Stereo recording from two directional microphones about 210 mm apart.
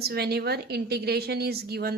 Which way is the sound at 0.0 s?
50° right (ahead or behind).